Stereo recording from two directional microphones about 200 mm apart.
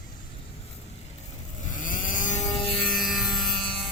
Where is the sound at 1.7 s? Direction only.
40° left (ahead or behind).